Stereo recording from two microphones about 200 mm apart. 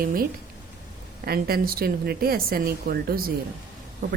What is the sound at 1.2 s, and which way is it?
Speech, 50° right (ahead or behind).